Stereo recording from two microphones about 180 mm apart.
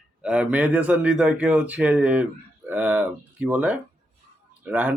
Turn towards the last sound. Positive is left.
turn(degrees=-10)  # may be behind; listen again after turning